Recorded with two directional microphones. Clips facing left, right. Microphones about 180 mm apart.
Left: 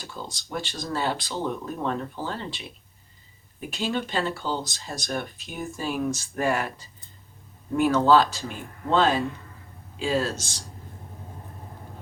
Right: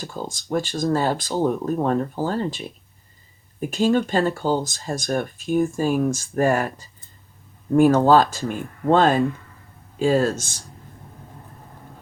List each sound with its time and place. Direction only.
0.0 s speech: 45° right (ahead or behind)